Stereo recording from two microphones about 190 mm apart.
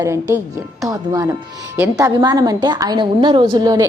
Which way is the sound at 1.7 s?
15° right (ahead or behind).